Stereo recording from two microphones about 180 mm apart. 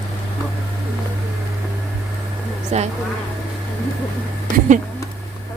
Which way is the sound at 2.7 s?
40° right (ahead or behind).